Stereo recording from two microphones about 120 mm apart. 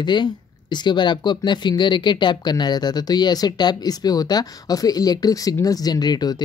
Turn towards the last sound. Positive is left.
turn(degrees=35)  # may be behind; listen again after turning